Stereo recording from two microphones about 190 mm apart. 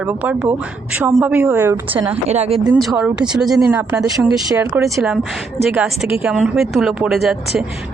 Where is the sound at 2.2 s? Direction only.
35° right (ahead or behind).